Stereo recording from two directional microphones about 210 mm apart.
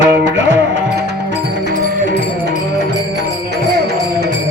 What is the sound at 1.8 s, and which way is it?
Music, 50° right (ahead or behind).